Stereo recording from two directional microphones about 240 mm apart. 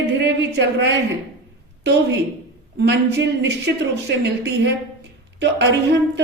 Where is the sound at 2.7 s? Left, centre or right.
Right.